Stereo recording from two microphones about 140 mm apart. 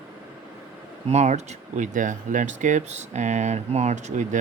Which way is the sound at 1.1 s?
55° right (ahead or behind).